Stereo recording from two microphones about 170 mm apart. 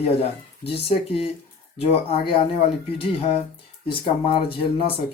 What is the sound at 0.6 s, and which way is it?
A man's voice, 35° left (ahead or behind).